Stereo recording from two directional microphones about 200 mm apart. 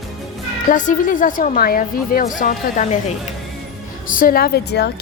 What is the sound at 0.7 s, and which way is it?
Speech, 40° left (ahead or behind).